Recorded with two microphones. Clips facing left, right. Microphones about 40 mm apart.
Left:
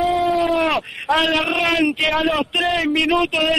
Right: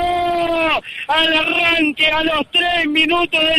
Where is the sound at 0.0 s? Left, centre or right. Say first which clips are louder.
Right 1 dB; centre.